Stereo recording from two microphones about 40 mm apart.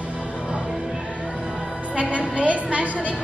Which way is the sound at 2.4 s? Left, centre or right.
Right.